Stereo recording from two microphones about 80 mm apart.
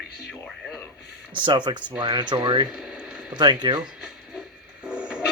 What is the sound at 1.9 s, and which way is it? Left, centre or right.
Speech, right.